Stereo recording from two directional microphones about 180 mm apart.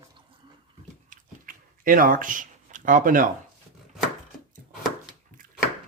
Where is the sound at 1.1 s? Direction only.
50° right (ahead or behind).